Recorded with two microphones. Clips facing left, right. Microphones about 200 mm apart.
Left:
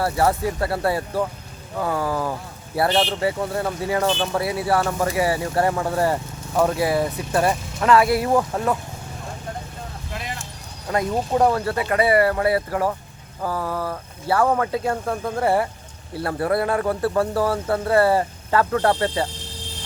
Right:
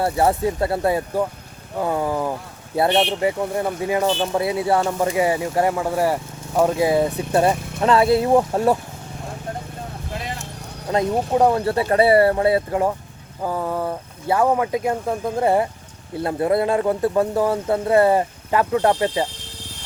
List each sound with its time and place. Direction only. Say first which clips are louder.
0.0 s speech: right 2 dB; 25° right (ahead or behind)
10.9 s speech: right 2 dB; 15° right (ahead or behind)
11.6 s speech: right 4 dB; 30° right (ahead or behind)